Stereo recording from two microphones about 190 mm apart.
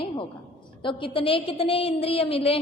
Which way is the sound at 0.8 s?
25° left (ahead or behind).